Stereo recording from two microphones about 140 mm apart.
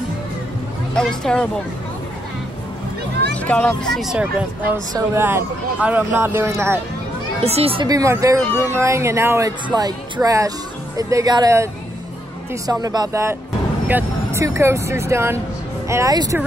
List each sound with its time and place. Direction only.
0.9 s speech: 5° left (ahead or behind)
3.3 s speech: 10° left (ahead or behind); by 6.8 s 20° right (ahead or behind)
7.4 s speech: 45° right (ahead or behind)
7.8 s speech: 25° right (ahead or behind)
13.8 s vehicle: 10° right (ahead or behind)
14.4 s speech: 20° right (ahead or behind)